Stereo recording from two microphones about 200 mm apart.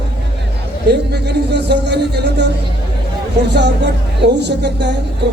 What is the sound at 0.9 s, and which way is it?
Speech, 55° right (ahead or behind).